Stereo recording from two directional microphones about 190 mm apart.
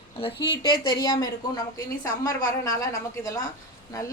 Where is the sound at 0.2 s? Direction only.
25° left (ahead or behind).